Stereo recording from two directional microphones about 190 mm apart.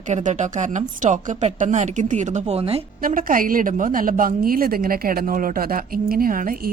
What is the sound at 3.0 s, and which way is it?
A woman's voice, 45° right (ahead or behind).